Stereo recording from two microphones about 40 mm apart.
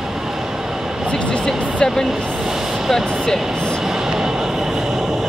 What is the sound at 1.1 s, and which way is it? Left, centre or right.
Vehicle, left.